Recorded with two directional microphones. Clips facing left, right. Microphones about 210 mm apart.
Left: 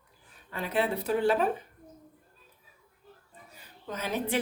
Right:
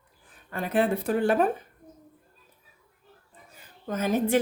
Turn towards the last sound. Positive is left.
turn(degrees=-45)  # may be behind; listen again after turning